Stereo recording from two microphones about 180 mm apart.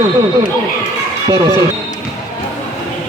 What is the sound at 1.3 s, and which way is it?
Speech, 20° right (ahead or behind).